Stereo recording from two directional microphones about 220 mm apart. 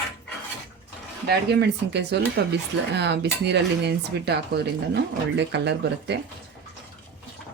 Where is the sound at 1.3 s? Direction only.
50° right (ahead or behind).